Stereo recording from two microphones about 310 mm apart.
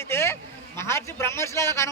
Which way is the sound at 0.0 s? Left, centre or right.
Centre.